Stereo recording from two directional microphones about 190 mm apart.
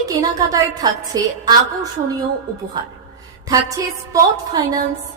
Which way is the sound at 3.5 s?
15° right (ahead or behind).